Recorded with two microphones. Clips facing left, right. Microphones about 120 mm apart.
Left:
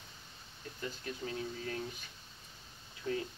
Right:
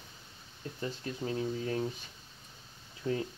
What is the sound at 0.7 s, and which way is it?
Speech, 30° right (ahead or behind).